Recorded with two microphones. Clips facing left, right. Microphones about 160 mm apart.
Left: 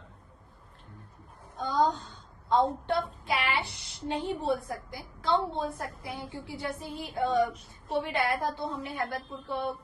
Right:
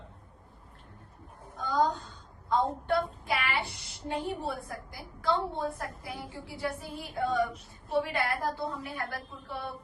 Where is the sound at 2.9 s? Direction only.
25° left (ahead or behind).